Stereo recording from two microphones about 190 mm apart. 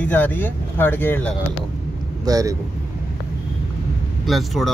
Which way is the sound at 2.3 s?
20° right (ahead or behind).